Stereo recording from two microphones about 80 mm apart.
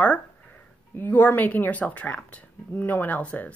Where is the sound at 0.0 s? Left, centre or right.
Centre.